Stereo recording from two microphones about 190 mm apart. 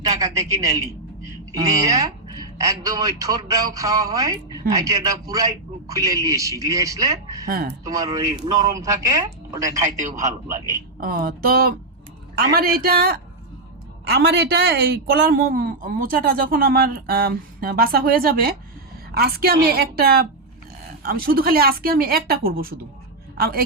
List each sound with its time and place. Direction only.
0.1 s a man's voice: 15° right (ahead or behind)
7.4 s a man's voice: 50° right (ahead or behind)
7.9 s a man's voice: 20° right (ahead or behind)
11.0 s a man's voice: 50° right (ahead or behind)